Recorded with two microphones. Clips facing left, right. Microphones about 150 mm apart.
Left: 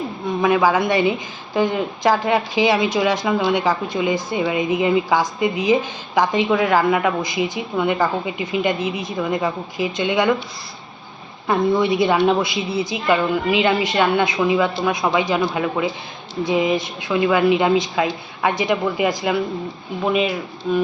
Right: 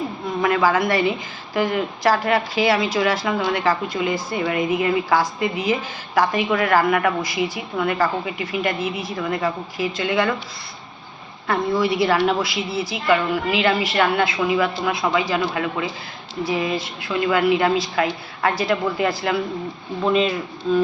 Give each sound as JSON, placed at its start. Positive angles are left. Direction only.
{"t": 0.4, "sound": "a woman's voice", "side_deg": 15}
{"t": 11.4, "sound": "a woman's voice", "side_deg": 20}